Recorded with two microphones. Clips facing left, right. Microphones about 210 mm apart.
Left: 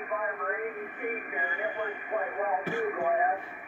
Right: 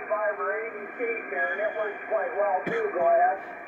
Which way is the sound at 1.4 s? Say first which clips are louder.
Right 4 dB; 45° right (ahead or behind).